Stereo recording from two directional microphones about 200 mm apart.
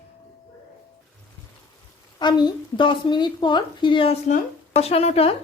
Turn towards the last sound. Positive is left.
turn(degrees=30)  # may be behind; listen again after turning